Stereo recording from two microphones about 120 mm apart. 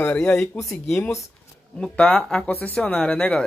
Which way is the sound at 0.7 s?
5° left (ahead or behind).